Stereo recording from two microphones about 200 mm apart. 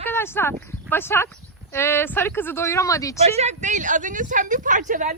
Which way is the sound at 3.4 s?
35° right (ahead or behind).